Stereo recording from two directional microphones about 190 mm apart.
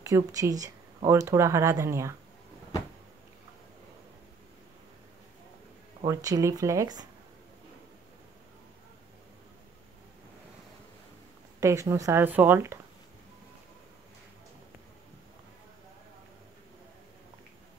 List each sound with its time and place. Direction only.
0.0 s speech: 20° right (ahead or behind)
6.0 s speech: 15° right (ahead or behind)
11.6 s speech: 15° right (ahead or behind)